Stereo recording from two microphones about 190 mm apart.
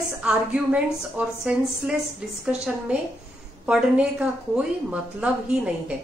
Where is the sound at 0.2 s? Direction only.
5° right (ahead or behind).